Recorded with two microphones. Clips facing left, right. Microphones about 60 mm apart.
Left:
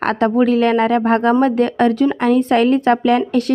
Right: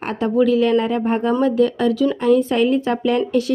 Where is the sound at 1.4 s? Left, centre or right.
Left.